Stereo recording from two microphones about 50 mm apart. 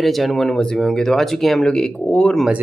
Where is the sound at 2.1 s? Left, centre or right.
Left.